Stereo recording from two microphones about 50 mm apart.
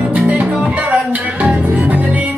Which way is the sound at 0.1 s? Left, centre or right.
Right.